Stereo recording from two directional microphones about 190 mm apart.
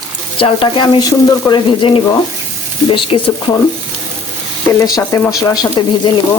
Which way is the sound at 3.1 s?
30° left (ahead or behind).